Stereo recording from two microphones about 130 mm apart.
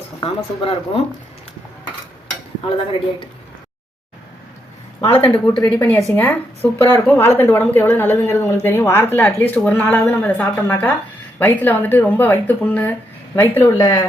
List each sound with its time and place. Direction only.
0.2 s speech: 45° left (ahead or behind)
5.0 s speech: 45° left (ahead or behind)
5.3 s speech: 10° left (ahead or behind)
13.7 s speech: 30° left (ahead or behind)